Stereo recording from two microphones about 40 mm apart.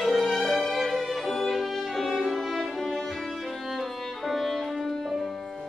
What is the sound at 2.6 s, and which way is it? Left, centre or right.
Music, centre.